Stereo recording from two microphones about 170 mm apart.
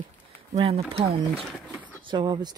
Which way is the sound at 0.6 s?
35° right (ahead or behind).